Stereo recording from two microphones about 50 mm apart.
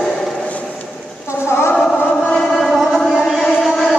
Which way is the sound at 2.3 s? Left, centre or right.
Centre.